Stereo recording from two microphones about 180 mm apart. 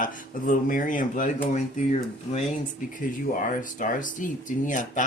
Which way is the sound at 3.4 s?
45° left (ahead or behind).